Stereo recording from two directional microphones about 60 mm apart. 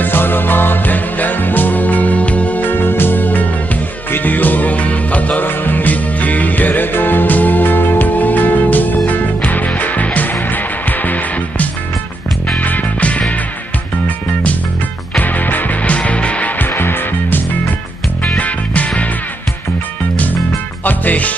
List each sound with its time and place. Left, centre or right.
0.0 s music: left
15.2 s music: left
16.6 s music: left
18.2 s music: left
20.8 s music: left